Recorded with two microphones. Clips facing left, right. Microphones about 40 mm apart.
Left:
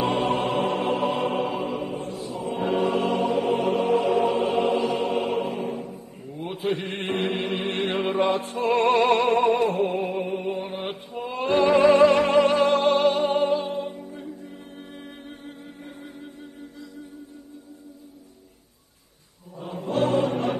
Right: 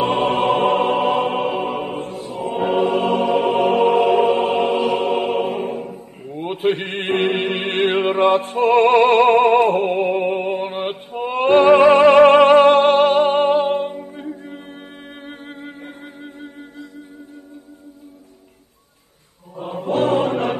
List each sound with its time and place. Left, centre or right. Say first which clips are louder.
0.0 s music: right 6 dB; right
2.6 s music: right 5 dB; right
5.8 s music: right 5 dB; right
9.9 s music: right 8 dB; right
19.6 s music: right 5 dB; right